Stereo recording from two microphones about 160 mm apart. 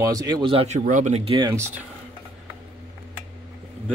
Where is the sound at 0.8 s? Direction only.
50° right (ahead or behind).